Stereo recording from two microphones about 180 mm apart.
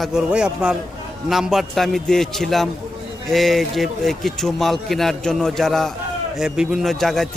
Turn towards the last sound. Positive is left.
turn(degrees=0)  # may be behind; listen again after turning